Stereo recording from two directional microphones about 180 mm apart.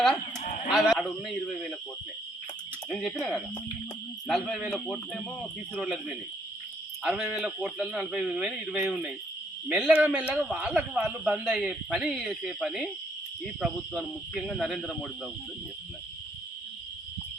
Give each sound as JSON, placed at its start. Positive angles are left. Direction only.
{"t": 0.3, "sound": "a sound", "side_deg": 45}
{"t": 0.7, "sound": "speech", "side_deg": 0}
{"t": 2.9, "sound": "speech", "side_deg": 5}
{"t": 5.7, "sound": "speech", "side_deg": -5}